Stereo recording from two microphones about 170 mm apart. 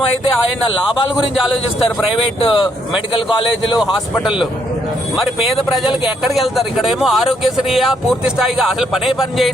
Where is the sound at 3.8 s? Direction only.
Centre (ahead or behind).